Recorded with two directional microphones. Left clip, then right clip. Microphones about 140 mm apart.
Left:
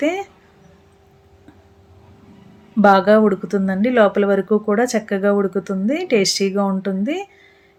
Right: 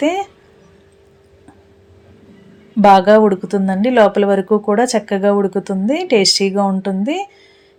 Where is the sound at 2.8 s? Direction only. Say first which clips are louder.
Right 4 dB; 20° right (ahead or behind).